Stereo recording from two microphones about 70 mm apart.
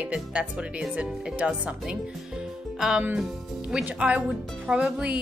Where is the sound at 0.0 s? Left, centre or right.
Centre.